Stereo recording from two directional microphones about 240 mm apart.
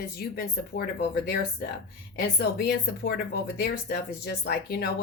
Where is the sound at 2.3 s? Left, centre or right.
Left.